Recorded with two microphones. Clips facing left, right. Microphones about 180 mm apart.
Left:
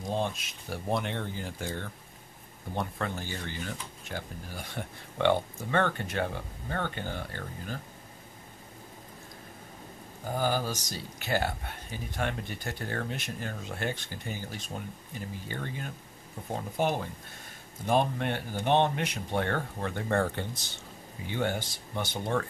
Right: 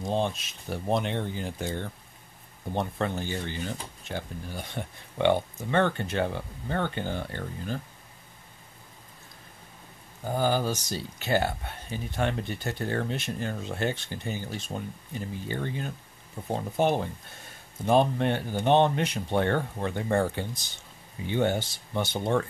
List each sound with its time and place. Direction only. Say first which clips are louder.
0.0 s speech: right 3 dB; 25° right (ahead or behind)
10.3 s speech: right 4 dB; 25° right (ahead or behind)
21.3 s speech: right 5 dB; 25° right (ahead or behind)